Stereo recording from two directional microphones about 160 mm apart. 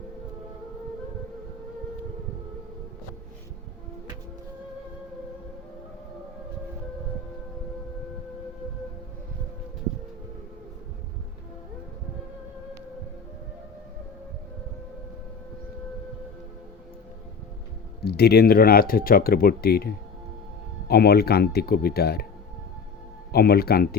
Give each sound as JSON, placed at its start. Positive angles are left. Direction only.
{"t": 18.0, "sound": "speech", "side_deg": 85}
{"t": 23.3, "sound": "speech", "side_deg": 75}